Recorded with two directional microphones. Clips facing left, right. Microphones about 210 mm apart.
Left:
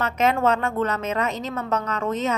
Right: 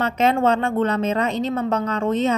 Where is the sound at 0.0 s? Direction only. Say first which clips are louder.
Right 2 dB; 30° right (ahead or behind).